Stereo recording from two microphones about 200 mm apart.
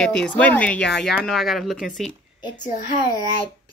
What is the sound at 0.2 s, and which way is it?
Speech, 5° left (ahead or behind).